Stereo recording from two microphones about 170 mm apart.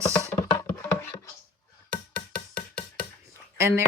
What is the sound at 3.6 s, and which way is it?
Speech, 15° right (ahead or behind).